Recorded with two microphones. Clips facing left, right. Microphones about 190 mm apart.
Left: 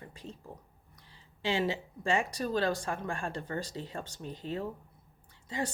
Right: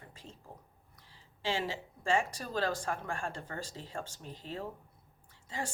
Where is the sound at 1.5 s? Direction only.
20° left (ahead or behind).